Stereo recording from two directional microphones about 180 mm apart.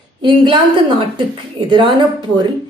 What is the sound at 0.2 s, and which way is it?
Speech, 25° right (ahead or behind).